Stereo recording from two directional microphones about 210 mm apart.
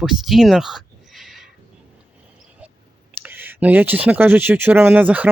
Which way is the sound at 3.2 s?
10° right (ahead or behind).